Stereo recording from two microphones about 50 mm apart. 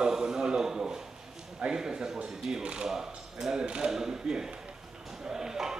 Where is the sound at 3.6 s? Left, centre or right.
Centre.